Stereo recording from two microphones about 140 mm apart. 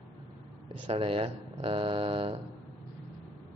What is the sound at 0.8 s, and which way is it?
Speech, 40° right (ahead or behind).